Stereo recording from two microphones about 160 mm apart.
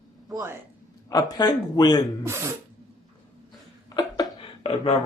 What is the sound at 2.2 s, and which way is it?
Speech, 15° right (ahead or behind).